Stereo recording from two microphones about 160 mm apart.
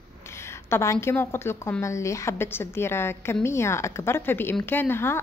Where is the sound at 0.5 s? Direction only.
15° left (ahead or behind).